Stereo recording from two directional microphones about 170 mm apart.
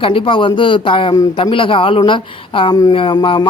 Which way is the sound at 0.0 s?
30° left (ahead or behind).